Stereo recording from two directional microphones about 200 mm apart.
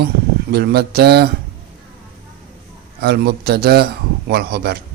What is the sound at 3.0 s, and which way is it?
Speech, 50° right (ahead or behind).